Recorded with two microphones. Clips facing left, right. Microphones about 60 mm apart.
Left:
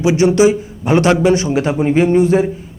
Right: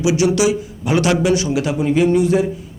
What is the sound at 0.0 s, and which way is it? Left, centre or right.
A man's voice, left.